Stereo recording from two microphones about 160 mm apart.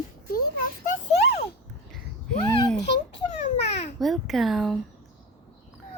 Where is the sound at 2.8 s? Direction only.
90° left.